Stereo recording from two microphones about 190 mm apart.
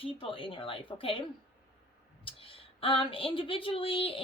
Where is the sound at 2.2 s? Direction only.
30° left (ahead or behind).